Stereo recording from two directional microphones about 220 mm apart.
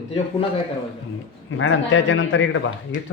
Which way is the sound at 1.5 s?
60° left (ahead or behind).